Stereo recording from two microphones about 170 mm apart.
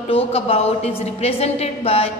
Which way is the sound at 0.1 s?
35° left (ahead or behind).